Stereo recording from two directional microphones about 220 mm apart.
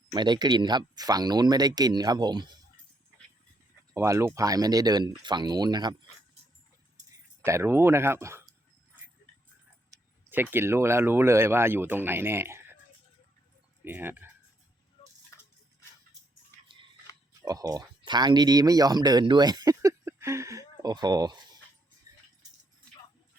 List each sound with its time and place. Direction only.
0.1 s speech: 20° right (ahead or behind)
3.9 s speech: 15° right (ahead or behind)
7.4 s speech: 10° right (ahead or behind)
10.2 s speech: 10° right (ahead or behind)
13.8 s speech: 10° right (ahead or behind)
17.4 s speech: 15° right (ahead or behind)
22.1 s a sound: 15° right (ahead or behind)